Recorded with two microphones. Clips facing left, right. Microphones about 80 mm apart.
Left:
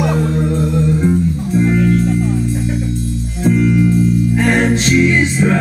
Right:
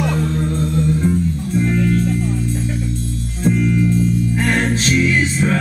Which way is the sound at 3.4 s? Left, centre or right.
Centre.